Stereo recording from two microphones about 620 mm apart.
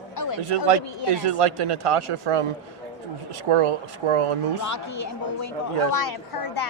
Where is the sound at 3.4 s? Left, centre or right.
Right.